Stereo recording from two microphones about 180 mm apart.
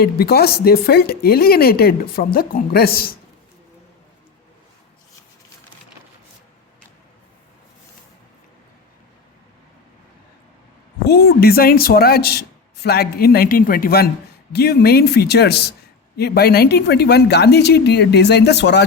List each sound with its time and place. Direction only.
0.0 s speech: 60° left (ahead or behind)
11.0 s a woman's voice: 60° left (ahead or behind)